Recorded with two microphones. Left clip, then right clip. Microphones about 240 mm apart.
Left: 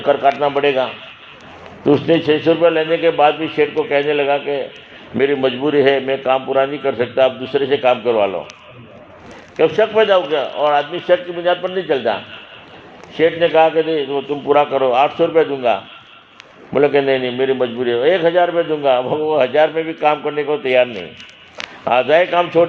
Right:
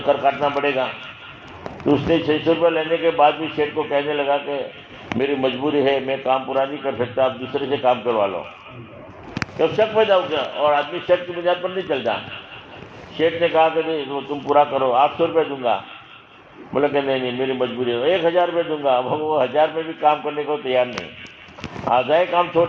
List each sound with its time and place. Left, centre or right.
0.0 s a man's voice: left
1.9 s a man's voice: left
9.6 s a man's voice: left
13.1 s a man's voice: left
21.8 s a man's voice: left